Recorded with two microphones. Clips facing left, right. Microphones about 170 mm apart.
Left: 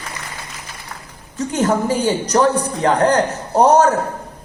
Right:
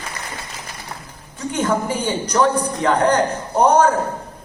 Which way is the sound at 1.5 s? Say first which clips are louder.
Left 3 dB; 40° left (ahead or behind).